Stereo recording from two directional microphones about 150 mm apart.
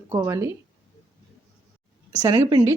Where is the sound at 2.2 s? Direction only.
25° right (ahead or behind).